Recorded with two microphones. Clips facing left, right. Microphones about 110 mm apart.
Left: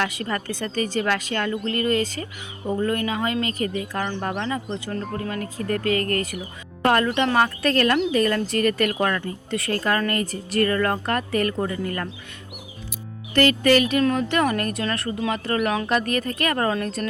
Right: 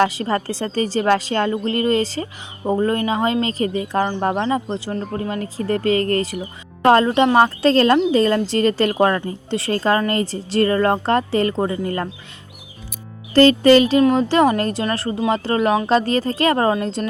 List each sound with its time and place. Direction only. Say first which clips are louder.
0.0 s a woman's voice: right 8 dB; 30° right (ahead or behind)
13.3 s a woman's voice: right 7 dB; 30° right (ahead or behind)